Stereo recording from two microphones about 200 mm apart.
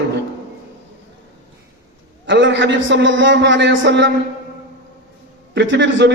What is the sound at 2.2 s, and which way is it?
A man's voice, 65° right (ahead or behind).